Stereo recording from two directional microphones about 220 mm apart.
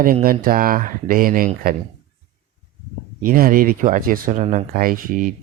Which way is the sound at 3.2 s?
40° right (ahead or behind).